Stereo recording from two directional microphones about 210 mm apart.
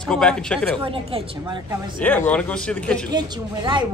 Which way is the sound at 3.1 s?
20° right (ahead or behind).